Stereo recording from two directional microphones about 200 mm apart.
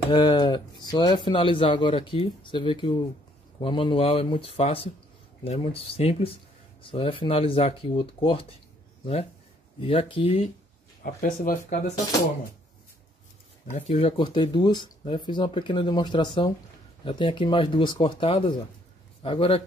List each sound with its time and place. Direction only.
0.1 s speech: 20° left (ahead or behind)
11.1 s speech: 45° left (ahead or behind)
13.7 s speech: 30° left (ahead or behind)